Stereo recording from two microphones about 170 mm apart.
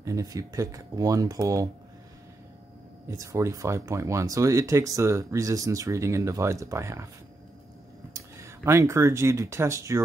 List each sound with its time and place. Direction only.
0.0 s speech: 20° right (ahead or behind)
3.1 s speech: 15° right (ahead or behind)
8.1 s speech: 15° right (ahead or behind)